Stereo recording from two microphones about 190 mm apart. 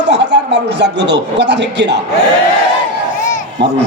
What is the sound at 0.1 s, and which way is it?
A man's voice, 65° right (ahead or behind).